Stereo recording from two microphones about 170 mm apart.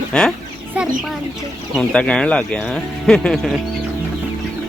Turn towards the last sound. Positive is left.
turn(degrees=5)  # may be behind; listen again after turning